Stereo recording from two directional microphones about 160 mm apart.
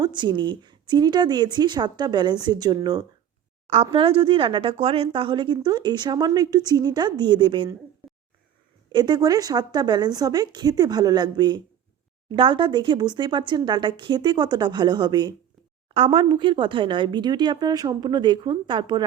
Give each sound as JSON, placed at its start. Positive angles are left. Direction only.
{"t": 0.0, "sound": "a woman's voice", "side_deg": -30}
{"t": 8.9, "sound": "speech", "side_deg": -25}